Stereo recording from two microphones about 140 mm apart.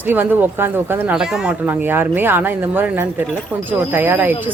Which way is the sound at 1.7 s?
15° right (ahead or behind).